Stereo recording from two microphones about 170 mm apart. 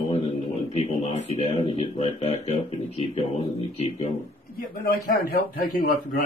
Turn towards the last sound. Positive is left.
turn(degrees=60)  # may be behind; listen again after turning